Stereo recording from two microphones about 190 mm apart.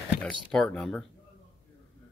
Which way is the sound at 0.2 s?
5° left (ahead or behind).